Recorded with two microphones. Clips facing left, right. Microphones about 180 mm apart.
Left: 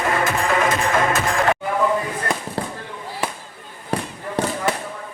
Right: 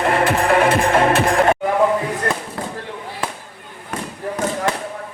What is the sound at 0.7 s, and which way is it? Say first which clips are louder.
Music: right 5 dB; 30° right (ahead or behind).